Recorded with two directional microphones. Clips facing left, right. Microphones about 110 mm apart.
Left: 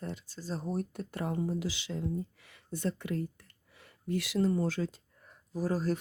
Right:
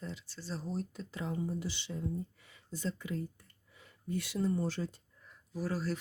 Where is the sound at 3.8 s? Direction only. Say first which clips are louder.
Left 4 dB; 90° left.